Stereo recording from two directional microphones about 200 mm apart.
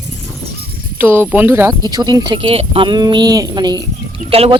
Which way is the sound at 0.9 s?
10° right (ahead or behind).